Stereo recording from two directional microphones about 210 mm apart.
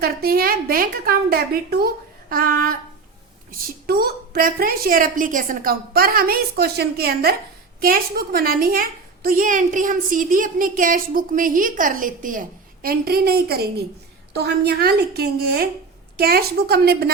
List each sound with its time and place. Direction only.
0.0 s a woman's voice: 45° right (ahead or behind)
3.8 s a woman's voice: 50° right (ahead or behind)